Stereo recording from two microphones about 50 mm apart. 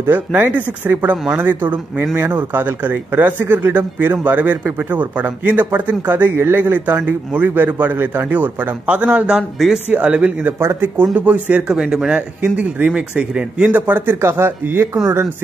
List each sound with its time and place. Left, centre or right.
0.0 s speech: right
10.6 s speech: right
11.1 s speech: right
11.8 s a man's voice: centre
12.4 s speech: right
13.7 s speech: right
14.1 s speech: right